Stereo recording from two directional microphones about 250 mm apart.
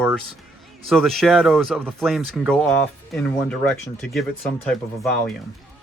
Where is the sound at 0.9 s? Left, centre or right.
Centre.